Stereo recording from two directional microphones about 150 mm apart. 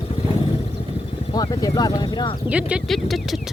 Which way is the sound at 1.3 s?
25° left (ahead or behind).